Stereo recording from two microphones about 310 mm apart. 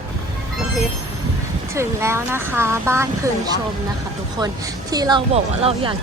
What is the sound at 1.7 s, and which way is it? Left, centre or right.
Speech, centre.